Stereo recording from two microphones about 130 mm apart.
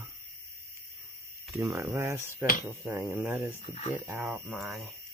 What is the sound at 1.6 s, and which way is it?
Speech, 20° right (ahead or behind).